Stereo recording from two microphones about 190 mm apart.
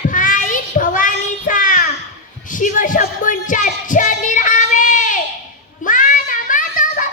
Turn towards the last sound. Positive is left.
turn(degrees=45)  # may be behind; listen again after turning